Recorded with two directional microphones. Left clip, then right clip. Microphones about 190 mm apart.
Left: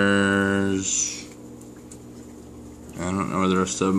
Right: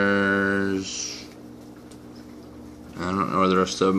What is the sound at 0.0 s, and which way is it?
Music, 15° left (ahead or behind).